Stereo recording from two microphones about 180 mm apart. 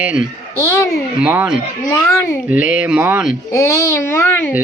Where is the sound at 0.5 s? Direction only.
15° left (ahead or behind).